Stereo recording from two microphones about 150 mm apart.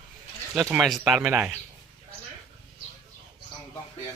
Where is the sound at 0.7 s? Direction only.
Centre (ahead or behind).